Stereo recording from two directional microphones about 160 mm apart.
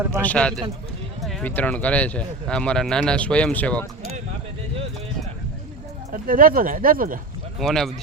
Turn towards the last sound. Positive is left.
turn(degrees=0)  # may be behind; listen again after turning